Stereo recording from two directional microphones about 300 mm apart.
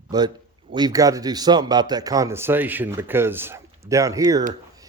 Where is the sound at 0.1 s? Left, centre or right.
Centre.